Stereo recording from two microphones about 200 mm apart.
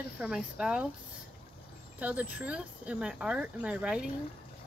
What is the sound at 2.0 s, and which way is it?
Speech, 5° right (ahead or behind).